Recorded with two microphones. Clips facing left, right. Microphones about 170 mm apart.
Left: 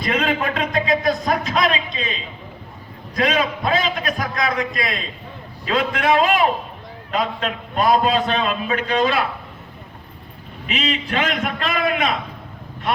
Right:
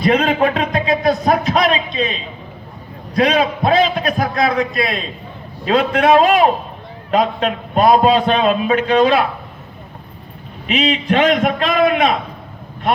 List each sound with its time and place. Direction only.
0.1 s a sound: 40° right (ahead or behind)
3.2 s a man's voice: 40° right (ahead or behind)
11.1 s a man's voice: 45° right (ahead or behind)